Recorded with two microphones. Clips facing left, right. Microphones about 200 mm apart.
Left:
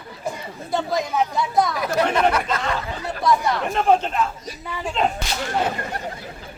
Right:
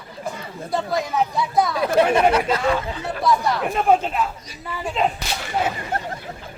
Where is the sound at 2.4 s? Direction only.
5° right (ahead or behind).